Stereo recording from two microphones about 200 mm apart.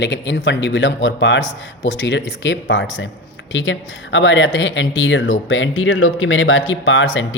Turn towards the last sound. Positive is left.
turn(degrees=70)  # may be behind; listen again after turning